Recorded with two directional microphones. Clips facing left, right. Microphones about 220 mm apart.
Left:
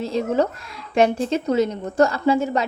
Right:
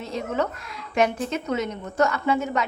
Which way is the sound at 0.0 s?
30° left (ahead or behind).